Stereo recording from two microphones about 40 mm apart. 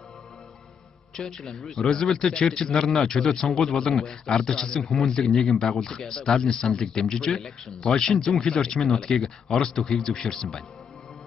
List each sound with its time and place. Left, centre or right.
1.1 s a man's voice: centre